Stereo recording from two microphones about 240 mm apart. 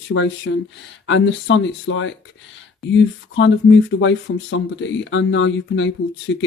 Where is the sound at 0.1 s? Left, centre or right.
Left.